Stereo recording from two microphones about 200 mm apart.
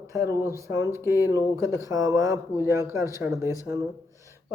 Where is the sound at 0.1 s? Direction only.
15° right (ahead or behind).